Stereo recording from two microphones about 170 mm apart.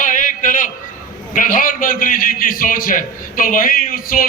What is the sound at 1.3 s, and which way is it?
A man's voice, 50° left (ahead or behind).